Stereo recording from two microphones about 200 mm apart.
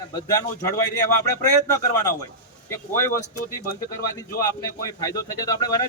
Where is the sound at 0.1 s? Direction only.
15° left (ahead or behind).